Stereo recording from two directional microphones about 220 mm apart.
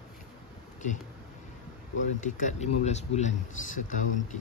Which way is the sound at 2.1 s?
35° left (ahead or behind).